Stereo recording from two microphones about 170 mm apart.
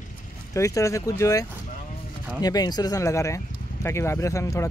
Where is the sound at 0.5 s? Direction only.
20° left (ahead or behind).